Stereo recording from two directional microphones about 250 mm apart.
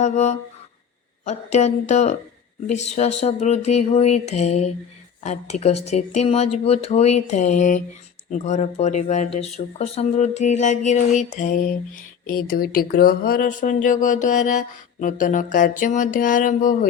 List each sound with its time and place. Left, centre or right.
0.0 s speech: left